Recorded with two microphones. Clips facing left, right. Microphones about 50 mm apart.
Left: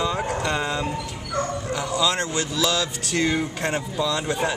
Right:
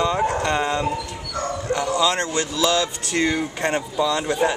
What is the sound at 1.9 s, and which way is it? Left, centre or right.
Speech, centre.